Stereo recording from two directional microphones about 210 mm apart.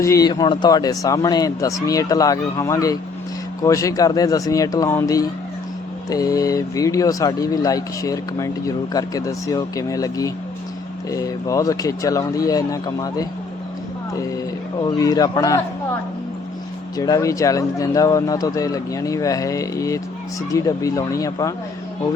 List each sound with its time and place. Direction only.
0.0 s speech: 15° left (ahead or behind)
14.8 s speech: 20° left (ahead or behind)
17.0 s speech: 15° left (ahead or behind)